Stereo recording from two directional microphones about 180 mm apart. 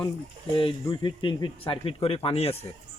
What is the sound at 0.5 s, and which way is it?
Speech, 30° left (ahead or behind).